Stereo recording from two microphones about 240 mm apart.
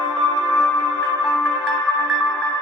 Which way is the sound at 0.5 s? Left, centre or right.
Centre.